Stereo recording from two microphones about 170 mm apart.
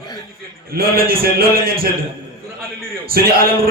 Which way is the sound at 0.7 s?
60° right (ahead or behind).